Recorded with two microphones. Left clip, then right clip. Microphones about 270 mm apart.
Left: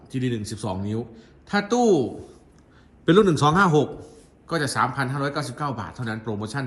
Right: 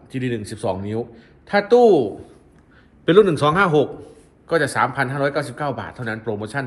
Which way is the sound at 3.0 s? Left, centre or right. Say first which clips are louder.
Right 4 dB; centre.